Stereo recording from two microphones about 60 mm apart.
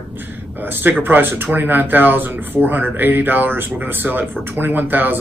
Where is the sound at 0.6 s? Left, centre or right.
Right.